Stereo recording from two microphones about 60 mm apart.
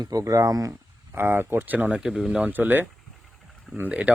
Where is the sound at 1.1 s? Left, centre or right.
Right.